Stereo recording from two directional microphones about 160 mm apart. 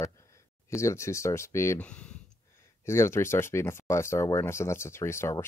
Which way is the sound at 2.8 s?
15° left (ahead or behind).